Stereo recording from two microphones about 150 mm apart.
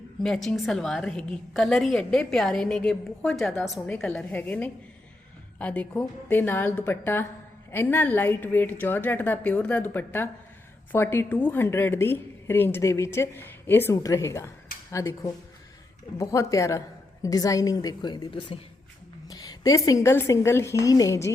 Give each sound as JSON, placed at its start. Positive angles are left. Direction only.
{"t": 0.2, "sound": "a woman's voice", "side_deg": 5}